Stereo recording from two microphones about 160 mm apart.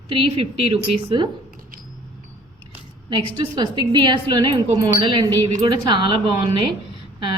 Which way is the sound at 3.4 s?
30° right (ahead or behind).